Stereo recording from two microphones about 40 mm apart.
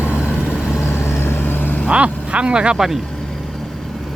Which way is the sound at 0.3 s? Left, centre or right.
Left.